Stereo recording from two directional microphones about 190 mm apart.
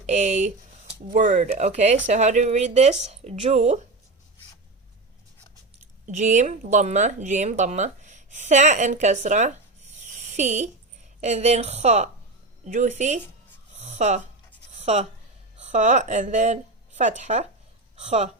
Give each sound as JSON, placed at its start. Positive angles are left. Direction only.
{"t": 0.0, "sound": "speech", "side_deg": -40}
{"t": 6.1, "sound": "speech", "side_deg": -40}
{"t": 13.7, "sound": "a sound", "side_deg": -40}
{"t": 15.6, "sound": "speech", "side_deg": -40}